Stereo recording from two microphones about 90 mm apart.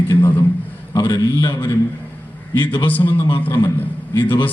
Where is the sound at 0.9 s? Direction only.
45° left (ahead or behind).